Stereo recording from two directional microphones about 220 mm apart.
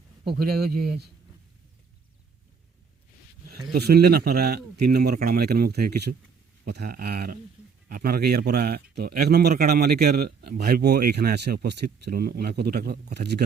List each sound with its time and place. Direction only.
0.3 s speech: 45° right (ahead or behind)
3.5 s speech: 45° right (ahead or behind)